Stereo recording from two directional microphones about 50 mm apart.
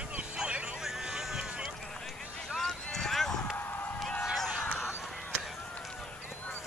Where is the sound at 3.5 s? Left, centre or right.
Left.